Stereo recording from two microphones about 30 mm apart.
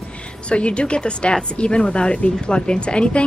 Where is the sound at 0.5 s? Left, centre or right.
Left.